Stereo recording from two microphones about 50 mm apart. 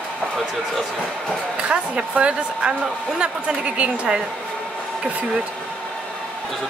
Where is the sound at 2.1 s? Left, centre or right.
Right.